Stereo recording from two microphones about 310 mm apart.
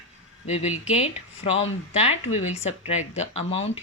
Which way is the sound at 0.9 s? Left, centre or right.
Centre.